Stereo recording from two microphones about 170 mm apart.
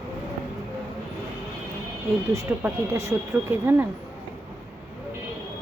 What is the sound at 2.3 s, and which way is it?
Speech, 15° right (ahead or behind).